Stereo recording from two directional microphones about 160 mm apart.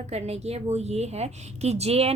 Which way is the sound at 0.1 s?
40° right (ahead or behind).